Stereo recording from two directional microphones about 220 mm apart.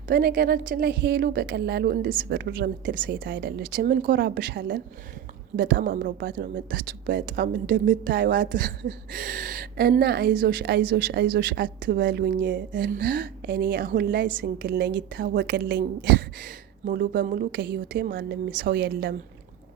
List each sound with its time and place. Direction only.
0.1 s speech: 45° right (ahead or behind)
13.0 s speech: 40° right (ahead or behind)
16.8 s speech: 40° right (ahead or behind)